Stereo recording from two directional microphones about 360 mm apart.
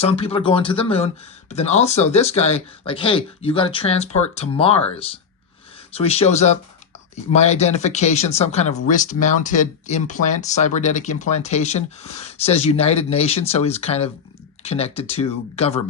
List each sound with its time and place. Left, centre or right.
0.0 s speech: centre
5.9 s speech: centre